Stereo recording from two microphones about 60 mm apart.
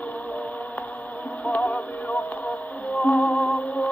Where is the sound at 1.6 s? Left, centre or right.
Centre.